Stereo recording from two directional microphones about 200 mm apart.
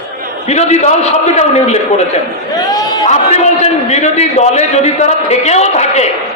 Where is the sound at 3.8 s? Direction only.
35° left (ahead or behind).